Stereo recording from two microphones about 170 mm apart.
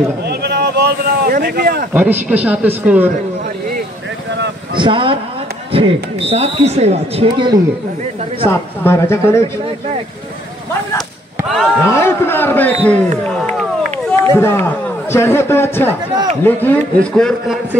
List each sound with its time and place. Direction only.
0.3 s a sound: 70° right (ahead or behind)
2.0 s speech: 10° right (ahead or behind)
4.7 s speech: 30° right (ahead or behind)
8.5 s a man's voice: 15° left (ahead or behind)
11.8 s a man's voice: 15° left (ahead or behind)
13.8 s run: 35° right (ahead or behind)
14.3 s a man's voice: 15° left (ahead or behind)